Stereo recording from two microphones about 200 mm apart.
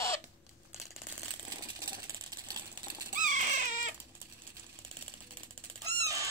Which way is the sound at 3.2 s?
40° right (ahead or behind).